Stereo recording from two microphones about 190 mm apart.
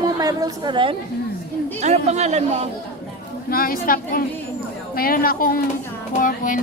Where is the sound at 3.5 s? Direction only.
50° left (ahead or behind).